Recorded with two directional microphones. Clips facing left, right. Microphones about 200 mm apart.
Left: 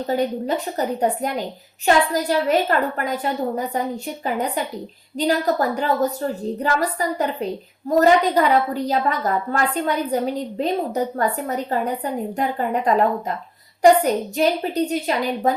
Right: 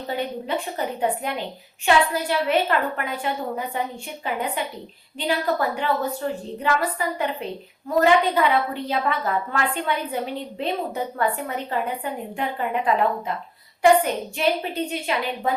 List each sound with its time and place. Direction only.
0.1 s a woman's voice: 40° left (ahead or behind)